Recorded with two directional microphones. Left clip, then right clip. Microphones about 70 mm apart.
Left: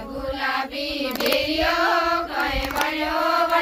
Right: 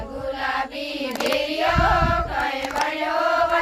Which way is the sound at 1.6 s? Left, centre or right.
Right.